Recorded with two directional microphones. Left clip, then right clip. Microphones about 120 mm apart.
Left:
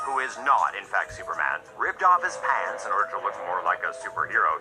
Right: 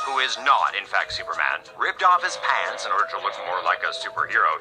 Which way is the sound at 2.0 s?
45° right (ahead or behind).